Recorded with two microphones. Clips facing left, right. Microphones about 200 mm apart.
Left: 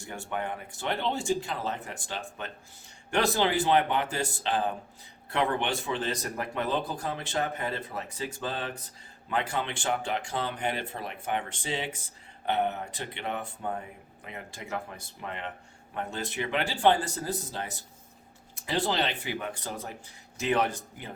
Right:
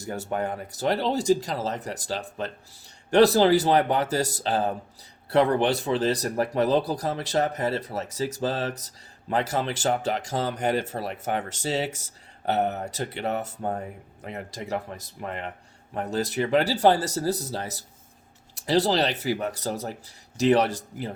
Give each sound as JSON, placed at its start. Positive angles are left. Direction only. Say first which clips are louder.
{"t": 0.0, "sound": "speech", "louder": "right 6 dB", "side_deg": -40}